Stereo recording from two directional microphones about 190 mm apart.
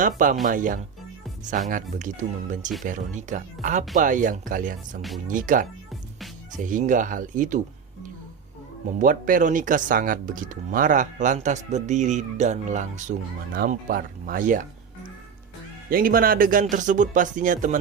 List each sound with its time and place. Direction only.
0.0 s speech: 45° right (ahead or behind)
5.9 s music: centre (ahead or behind)
6.6 s speech: 45° right (ahead or behind)
9.0 s speech: 45° right (ahead or behind)
15.9 s speech: 50° right (ahead or behind)